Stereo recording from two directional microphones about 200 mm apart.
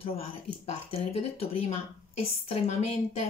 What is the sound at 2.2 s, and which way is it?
Speech, 30° left (ahead or behind).